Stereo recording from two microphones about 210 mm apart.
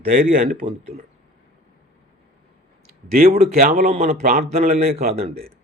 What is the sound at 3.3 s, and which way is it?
Speech, 30° right (ahead or behind).